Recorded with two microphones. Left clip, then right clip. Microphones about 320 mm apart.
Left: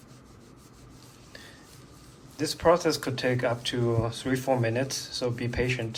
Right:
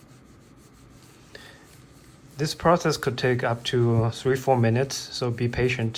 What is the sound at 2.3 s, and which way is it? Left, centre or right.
Speech, centre.